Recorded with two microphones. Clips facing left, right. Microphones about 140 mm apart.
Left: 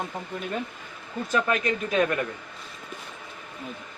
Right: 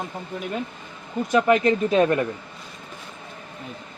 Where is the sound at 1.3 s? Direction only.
25° right (ahead or behind).